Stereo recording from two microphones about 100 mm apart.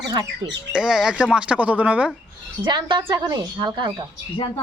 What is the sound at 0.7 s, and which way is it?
Speech, 5° right (ahead or behind).